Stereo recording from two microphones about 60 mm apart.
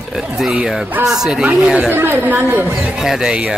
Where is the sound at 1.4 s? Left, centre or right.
Centre.